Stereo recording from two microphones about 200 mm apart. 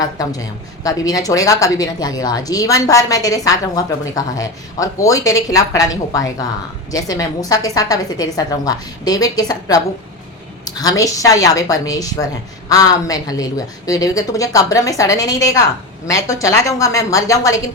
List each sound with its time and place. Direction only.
0.0 s a woman's voice: 20° left (ahead or behind)